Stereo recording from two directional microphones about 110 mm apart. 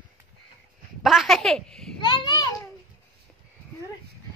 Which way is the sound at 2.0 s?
40° left (ahead or behind).